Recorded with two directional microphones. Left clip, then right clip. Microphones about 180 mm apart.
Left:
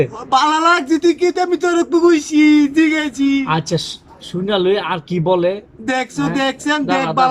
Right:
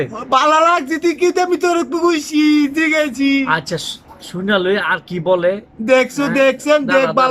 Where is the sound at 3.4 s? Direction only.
15° left (ahead or behind).